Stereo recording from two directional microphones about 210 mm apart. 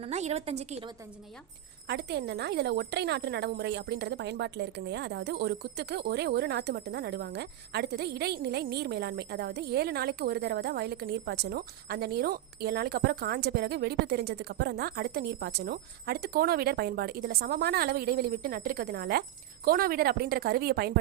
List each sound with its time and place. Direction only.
0.0 s a woman's voice: 30° right (ahead or behind)
1.9 s a woman's voice: 50° right (ahead or behind)